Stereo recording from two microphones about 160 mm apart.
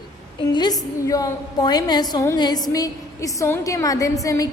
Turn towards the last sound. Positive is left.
turn(degrees=20)  # may be behind; listen again after turning